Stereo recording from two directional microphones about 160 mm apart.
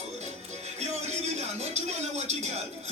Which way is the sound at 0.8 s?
40° right (ahead or behind).